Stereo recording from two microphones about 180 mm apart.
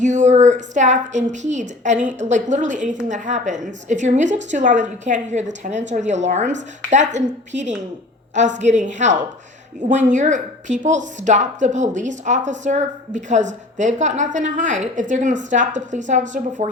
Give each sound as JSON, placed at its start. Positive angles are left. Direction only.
{"t": 0.0, "sound": "a woman's voice", "side_deg": -40}